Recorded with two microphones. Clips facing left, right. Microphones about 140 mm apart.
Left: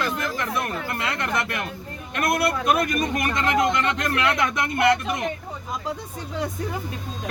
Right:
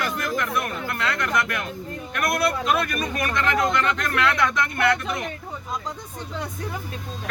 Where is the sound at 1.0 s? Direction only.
20° left (ahead or behind).